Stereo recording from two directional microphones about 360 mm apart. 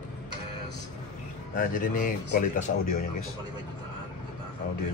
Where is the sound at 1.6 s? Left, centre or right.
Left.